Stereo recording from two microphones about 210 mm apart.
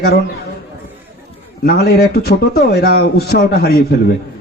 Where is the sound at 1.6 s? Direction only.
50° left (ahead or behind).